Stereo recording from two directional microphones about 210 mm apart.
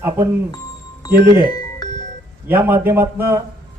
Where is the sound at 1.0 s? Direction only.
20° left (ahead or behind).